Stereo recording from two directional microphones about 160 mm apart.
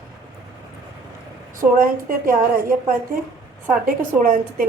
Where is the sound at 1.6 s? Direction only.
60° right (ahead or behind).